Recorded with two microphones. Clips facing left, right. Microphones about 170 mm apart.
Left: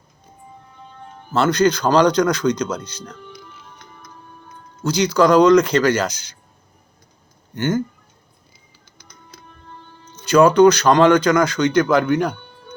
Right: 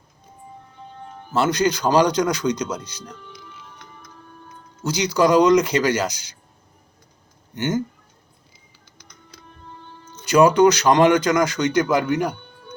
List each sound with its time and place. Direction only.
1.3 s speech: 15° right (ahead or behind)
4.9 s speech: 15° right (ahead or behind)
7.5 s speech: 20° right (ahead or behind)
10.2 s speech: 15° right (ahead or behind)